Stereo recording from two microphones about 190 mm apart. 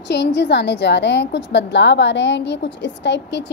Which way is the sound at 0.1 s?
65° left (ahead or behind).